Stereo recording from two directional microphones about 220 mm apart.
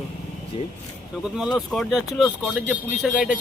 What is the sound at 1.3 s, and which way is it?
A man's voice, centre (ahead or behind).